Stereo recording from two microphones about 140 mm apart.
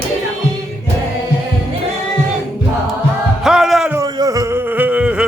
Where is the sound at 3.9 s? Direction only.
25° right (ahead or behind); by 5.3 s 5° right (ahead or behind).